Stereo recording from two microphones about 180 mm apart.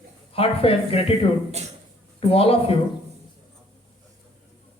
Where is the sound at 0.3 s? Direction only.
30° left (ahead or behind).